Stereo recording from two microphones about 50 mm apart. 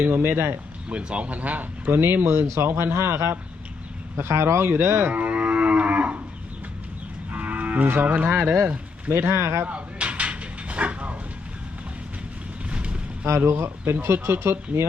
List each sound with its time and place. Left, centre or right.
0.1 s speech: right
0.9 s speech: right
1.9 s speech: right
5.1 s livestock: right
7.3 s moo: right
8.6 s speech: right
9.2 s speech: right
9.6 s cutlery: right
12.6 s boat: right
13.4 s speech: right